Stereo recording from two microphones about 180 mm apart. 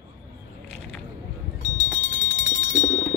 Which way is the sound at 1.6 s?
40° left (ahead or behind).